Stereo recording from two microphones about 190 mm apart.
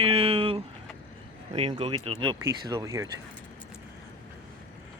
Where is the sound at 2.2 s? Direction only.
20° right (ahead or behind).